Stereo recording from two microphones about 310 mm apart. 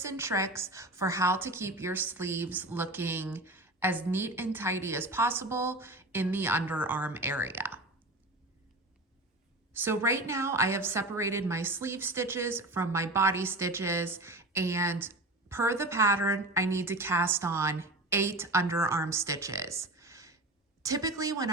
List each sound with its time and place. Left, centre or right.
0.0 s a woman's voice: centre
9.7 s a woman's voice: centre